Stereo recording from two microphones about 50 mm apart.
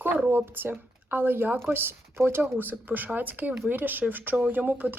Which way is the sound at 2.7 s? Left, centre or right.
Right.